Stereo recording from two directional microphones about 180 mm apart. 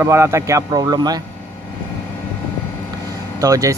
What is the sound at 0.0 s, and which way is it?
Speech, 15° right (ahead or behind).